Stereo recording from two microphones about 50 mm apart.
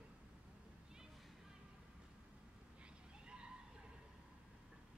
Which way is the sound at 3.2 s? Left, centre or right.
Centre.